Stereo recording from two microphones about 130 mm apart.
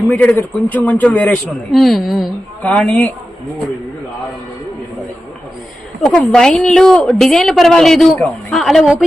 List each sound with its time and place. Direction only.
0.1 s a man's voice: 10° left (ahead or behind)
2.6 s a man's voice: 10° left (ahead or behind)
6.1 s a woman's voice: 5° left (ahead or behind)